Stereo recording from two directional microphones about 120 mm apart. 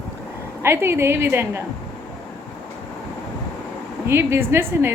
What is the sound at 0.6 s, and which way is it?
A woman's voice, 20° right (ahead or behind).